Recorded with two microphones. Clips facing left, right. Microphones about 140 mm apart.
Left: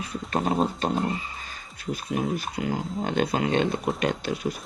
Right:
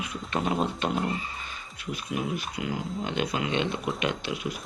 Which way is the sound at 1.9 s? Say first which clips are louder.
Left 4 dB; 40° left (ahead or behind).